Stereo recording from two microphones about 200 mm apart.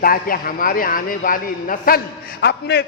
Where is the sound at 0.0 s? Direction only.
45° left (ahead or behind).